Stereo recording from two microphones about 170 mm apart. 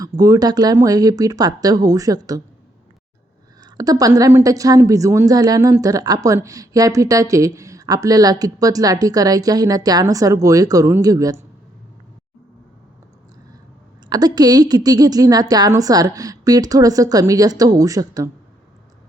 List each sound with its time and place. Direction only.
0.0 s a woman's voice: 20° right (ahead or behind)
3.6 s a woman's voice: 20° right (ahead or behind)
14.1 s a woman's voice: 25° right (ahead or behind)